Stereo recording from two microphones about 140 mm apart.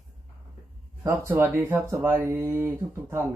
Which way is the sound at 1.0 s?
15° right (ahead or behind).